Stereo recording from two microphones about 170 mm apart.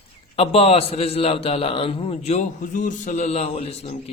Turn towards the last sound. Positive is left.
turn(degrees=35)  # may be behind; listen again after turning